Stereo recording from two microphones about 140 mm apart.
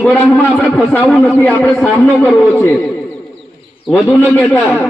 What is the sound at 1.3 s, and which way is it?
A man's voice, 15° left (ahead or behind).